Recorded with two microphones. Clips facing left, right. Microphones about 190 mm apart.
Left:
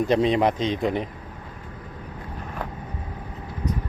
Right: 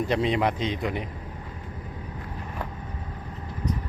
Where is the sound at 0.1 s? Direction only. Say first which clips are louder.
Left 5 dB; 20° left (ahead or behind).